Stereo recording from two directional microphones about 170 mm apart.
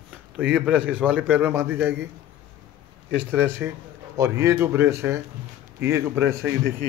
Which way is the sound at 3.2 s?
10° right (ahead or behind).